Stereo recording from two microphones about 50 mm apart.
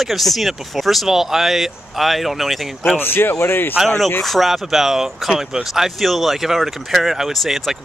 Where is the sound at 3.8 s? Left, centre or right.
Centre.